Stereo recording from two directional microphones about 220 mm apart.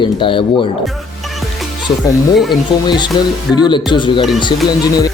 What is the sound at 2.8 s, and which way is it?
Speech, 20° left (ahead or behind).